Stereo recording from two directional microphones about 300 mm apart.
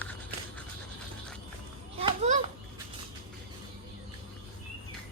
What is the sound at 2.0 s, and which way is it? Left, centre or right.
Children playing, right.